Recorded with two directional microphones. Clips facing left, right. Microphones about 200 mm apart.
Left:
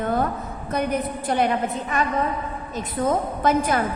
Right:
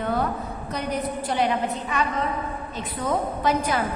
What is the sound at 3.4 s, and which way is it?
Speech, 50° left (ahead or behind).